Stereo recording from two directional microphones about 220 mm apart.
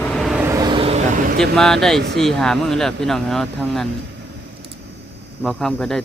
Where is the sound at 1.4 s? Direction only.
Centre (ahead or behind).